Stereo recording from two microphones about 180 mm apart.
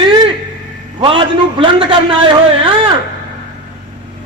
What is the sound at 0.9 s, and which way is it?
A man's voice, 30° right (ahead or behind).